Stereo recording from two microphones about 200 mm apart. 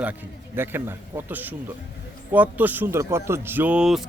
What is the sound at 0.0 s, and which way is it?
Speech, 10° right (ahead or behind).